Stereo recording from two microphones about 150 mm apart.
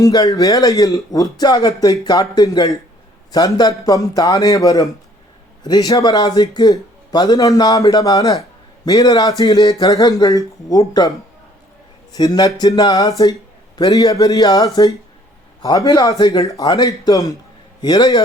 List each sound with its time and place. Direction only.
0.0 s a man's voice: 25° left (ahead or behind)
12.1 s a man's voice: 25° left (ahead or behind)